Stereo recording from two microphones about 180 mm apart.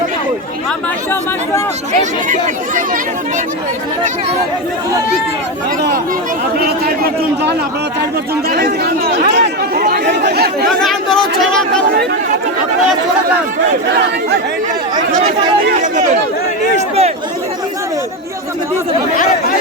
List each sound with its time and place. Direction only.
2.0 s speech: 45° right (ahead or behind)
6.6 s speech: 60° right (ahead or behind)
10.7 s speech: centre (ahead or behind)
15.2 s speech: 40° right (ahead or behind)